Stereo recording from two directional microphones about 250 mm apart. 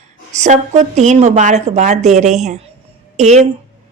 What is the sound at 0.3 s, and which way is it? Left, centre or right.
Speech, right.